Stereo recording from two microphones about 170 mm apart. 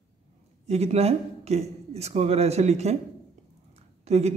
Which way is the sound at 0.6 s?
40° right (ahead or behind).